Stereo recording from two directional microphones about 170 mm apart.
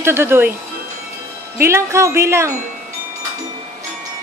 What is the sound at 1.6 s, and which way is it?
Speech, 15° right (ahead or behind).